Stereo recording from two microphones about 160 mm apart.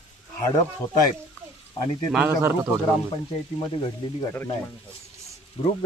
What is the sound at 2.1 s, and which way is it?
Speech, 10° right (ahead or behind).